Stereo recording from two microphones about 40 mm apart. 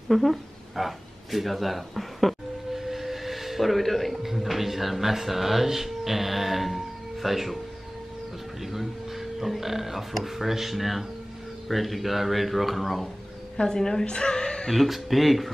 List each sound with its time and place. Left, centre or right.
0.1 s speech: centre
8.6 s speech: centre
13.6 s a woman's voice: centre
14.7 s speech: centre